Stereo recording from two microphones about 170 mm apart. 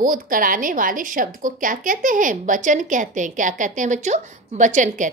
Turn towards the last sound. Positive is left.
turn(degrees=-45)  # may be behind; listen again after turning